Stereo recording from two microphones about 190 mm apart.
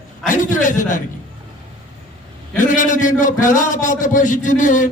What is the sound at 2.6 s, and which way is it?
A man's voice, 40° left (ahead or behind).